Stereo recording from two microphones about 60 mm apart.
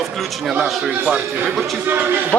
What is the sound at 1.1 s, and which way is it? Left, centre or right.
A man's voice, right.